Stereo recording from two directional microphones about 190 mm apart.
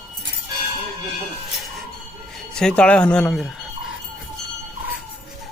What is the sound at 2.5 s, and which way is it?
Speech, 5° left (ahead or behind).